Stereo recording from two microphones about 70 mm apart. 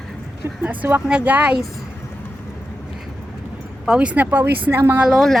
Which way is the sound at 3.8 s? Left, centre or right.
Centre.